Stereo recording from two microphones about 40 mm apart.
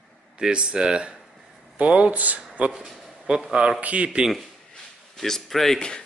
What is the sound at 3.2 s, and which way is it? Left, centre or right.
Speech, right.